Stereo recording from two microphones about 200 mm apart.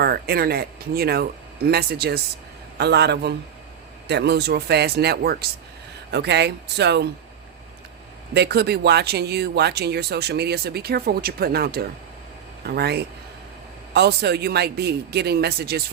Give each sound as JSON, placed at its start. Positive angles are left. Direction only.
{"t": 0.0, "sound": "speech", "side_deg": -50}
{"t": 8.3, "sound": "speech", "side_deg": -55}